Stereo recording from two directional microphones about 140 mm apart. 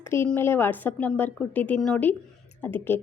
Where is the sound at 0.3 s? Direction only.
15° left (ahead or behind).